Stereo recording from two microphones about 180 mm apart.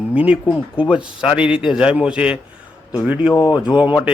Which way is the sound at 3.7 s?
10° right (ahead or behind).